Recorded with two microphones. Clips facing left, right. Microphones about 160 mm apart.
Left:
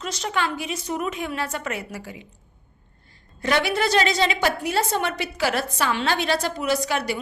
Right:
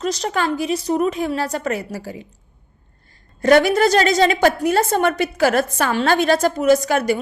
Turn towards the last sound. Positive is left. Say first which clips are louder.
# right 8 dB
turn(degrees=-45)  # may be behind; listen again after turning